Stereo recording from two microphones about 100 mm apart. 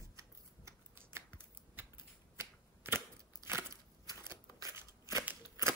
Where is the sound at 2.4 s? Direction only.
20° right (ahead or behind).